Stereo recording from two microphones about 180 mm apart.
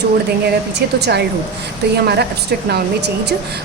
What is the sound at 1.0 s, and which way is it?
A woman's voice, 65° right (ahead or behind).